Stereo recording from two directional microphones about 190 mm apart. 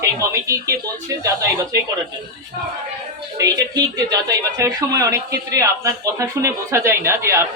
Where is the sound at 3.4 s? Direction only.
20° right (ahead or behind).